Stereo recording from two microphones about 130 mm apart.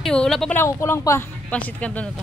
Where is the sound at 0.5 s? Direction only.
20° left (ahead or behind).